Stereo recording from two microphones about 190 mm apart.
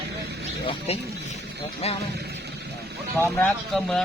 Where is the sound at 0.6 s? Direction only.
30° left (ahead or behind).